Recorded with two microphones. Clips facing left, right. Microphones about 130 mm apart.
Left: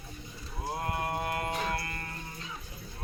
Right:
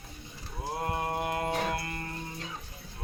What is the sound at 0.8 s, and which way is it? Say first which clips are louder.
Mantra: right 2 dB; 25° right (ahead or behind).